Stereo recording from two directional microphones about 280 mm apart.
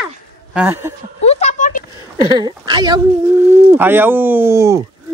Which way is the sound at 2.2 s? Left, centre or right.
Centre.